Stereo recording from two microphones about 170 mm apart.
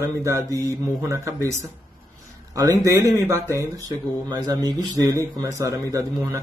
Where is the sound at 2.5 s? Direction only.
20° right (ahead or behind).